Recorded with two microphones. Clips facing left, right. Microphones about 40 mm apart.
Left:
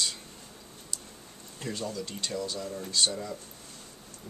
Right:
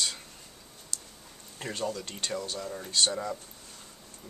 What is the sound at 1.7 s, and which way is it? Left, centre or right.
Speech, right.